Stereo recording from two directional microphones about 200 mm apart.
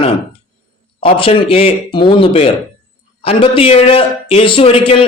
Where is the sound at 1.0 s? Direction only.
25° left (ahead or behind).